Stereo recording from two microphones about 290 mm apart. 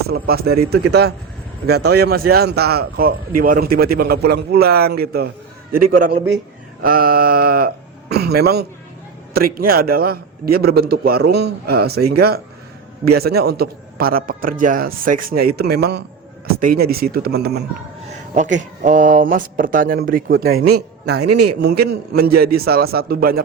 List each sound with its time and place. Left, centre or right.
0.1 s a man's voice: right
20.5 s speech: right
21.8 s a man's voice: right